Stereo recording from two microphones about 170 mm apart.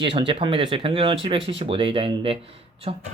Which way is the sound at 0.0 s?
30° right (ahead or behind).